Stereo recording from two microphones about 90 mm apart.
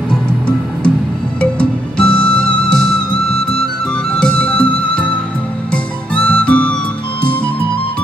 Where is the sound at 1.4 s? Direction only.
10° left (ahead or behind).